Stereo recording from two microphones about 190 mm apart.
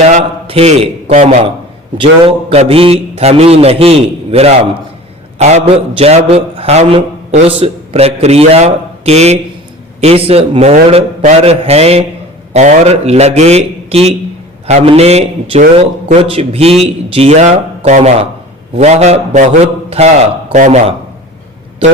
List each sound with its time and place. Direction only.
0.1 s a man's voice: 35° right (ahead or behind)